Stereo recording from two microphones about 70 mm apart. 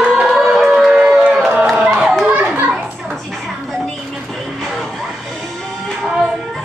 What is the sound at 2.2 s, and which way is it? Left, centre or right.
Children playing, right.